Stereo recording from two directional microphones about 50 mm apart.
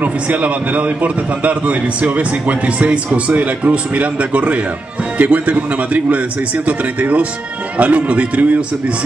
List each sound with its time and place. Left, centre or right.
0.0 s a man's voice: right